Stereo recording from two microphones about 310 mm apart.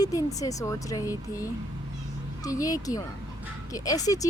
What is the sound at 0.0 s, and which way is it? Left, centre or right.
Speech, centre.